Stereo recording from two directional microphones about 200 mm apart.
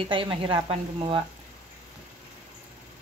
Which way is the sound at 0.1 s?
25° right (ahead or behind).